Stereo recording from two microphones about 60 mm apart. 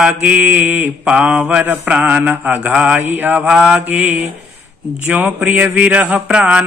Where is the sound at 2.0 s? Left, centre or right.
Right.